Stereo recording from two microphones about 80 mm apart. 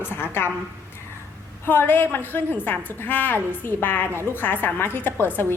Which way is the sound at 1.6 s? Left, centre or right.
Left.